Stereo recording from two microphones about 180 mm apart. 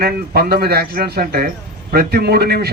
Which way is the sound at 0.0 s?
60° right (ahead or behind).